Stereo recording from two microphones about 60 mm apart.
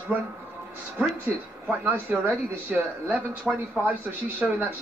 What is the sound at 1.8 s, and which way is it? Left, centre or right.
Speech, right.